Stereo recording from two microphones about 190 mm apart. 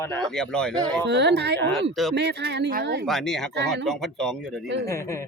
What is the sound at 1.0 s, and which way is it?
Speech, 65° right (ahead or behind).